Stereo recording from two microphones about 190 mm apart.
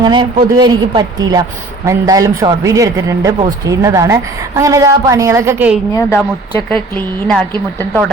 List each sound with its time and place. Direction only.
0.0 s a woman's voice: 25° right (ahead or behind)
5.9 s a woman's voice: 15° left (ahead or behind)